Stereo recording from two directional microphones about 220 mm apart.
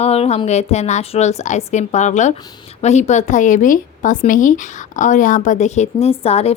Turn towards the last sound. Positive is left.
turn(degrees=30)  # may be behind; listen again after turning